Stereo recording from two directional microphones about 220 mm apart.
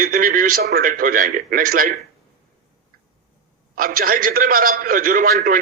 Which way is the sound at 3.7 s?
40° right (ahead or behind).